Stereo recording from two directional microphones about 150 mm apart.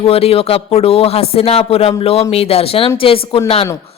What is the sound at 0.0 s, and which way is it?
A woman's voice, 40° left (ahead or behind).